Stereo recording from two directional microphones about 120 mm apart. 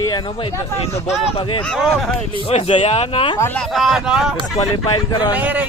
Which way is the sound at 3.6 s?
Centre (ahead or behind).